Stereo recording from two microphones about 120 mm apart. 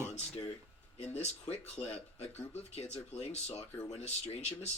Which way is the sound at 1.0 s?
60° left (ahead or behind).